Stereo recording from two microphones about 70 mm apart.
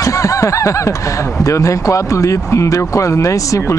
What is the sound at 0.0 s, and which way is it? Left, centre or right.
Speech, left.